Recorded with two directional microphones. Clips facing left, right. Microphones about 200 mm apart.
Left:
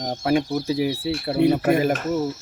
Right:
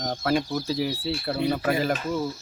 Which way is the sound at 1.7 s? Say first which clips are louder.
Left 5 dB; 50° left (ahead or behind).